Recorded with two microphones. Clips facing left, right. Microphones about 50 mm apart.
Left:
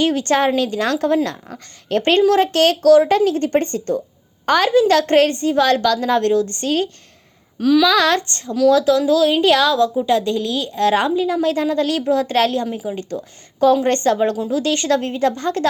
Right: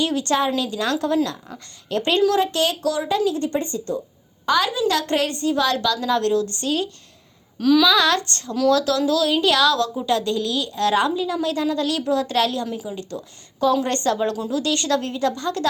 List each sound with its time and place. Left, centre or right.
0.0 s a woman's voice: left
7.6 s a sound: centre
7.9 s a woman's voice: left
8.7 s a woman's voice: left